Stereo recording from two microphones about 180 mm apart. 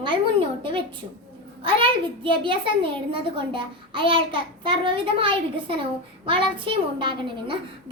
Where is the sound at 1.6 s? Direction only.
30° right (ahead or behind).